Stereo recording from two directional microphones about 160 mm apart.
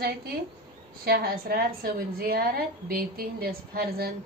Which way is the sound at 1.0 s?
70° right (ahead or behind).